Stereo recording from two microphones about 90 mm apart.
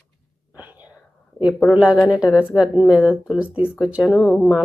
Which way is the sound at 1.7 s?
10° right (ahead or behind).